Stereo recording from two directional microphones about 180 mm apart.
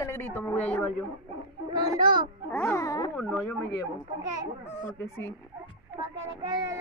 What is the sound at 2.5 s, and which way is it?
Dog, 15° left (ahead or behind).